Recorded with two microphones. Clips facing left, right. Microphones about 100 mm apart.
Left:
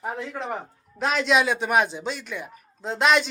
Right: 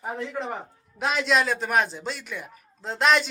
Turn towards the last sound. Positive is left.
turn(degrees=0)  # may be behind; listen again after turning